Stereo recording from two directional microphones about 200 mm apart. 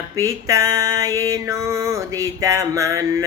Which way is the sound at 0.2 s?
15° right (ahead or behind).